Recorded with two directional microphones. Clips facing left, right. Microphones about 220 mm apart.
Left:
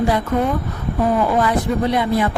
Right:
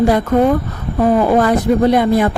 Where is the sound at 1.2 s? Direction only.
50° right (ahead or behind).